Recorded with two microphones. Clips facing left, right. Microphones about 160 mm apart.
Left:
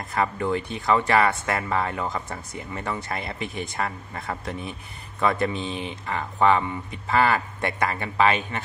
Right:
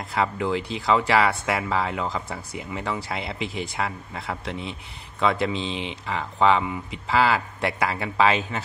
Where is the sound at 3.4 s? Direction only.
90° right.